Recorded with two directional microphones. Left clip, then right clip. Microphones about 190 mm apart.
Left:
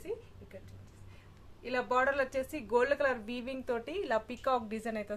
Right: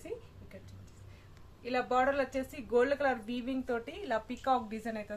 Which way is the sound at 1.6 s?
55° left (ahead or behind).